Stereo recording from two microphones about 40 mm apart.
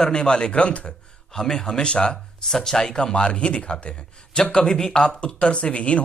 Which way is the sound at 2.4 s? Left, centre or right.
Centre.